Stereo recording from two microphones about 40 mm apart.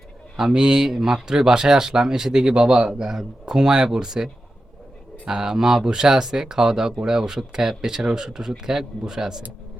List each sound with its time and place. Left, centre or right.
0.3 s speech: centre